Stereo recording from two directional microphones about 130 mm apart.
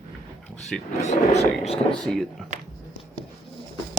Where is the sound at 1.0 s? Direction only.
55° left (ahead or behind).